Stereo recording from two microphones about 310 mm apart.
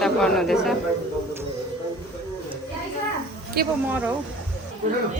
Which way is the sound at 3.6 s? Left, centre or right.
Right.